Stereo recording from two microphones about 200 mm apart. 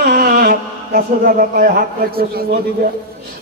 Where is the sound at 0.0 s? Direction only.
50° right (ahead or behind).